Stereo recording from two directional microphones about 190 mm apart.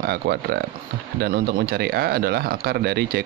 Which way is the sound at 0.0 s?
55° right (ahead or behind).